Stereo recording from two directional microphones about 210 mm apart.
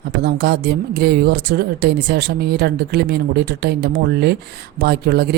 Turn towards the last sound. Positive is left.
turn(degrees=-50)  # may be behind; listen again after turning